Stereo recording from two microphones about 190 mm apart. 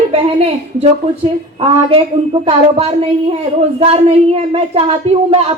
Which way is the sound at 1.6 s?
30° right (ahead or behind).